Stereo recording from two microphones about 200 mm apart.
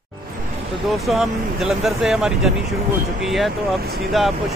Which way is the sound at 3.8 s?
50° right (ahead or behind).